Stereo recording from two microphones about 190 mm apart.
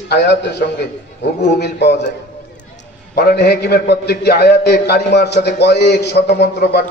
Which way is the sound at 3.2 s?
55° left (ahead or behind).